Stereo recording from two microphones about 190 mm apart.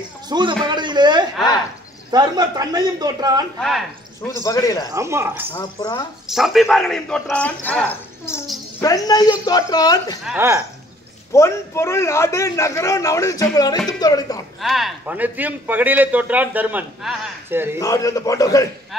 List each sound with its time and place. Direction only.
0.3 s a man's voice: 25° right (ahead or behind)
3.5 s a man's voice: centre (ahead or behind)
4.2 s a man's voice: 15° left (ahead or behind)
4.8 s a man's voice: 15° right (ahead or behind)
5.6 s speech: 20° left (ahead or behind)
6.3 s a man's voice: centre (ahead or behind)
8.8 s speech: 20° left (ahead or behind)
10.2 s a man's voice: 10° right (ahead or behind)
11.3 s a man's voice: 15° left (ahead or behind)
14.6 s a man's voice: centre (ahead or behind)
17.7 s a man's voice: 15° left (ahead or behind)